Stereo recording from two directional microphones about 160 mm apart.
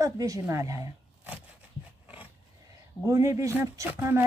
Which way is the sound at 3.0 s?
20° right (ahead or behind).